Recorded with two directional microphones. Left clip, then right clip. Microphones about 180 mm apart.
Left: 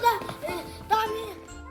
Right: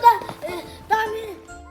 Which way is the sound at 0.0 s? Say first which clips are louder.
Right 9 dB; 60° right (ahead or behind).